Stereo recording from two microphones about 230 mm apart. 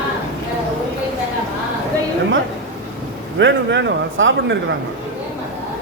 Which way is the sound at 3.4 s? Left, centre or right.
Right.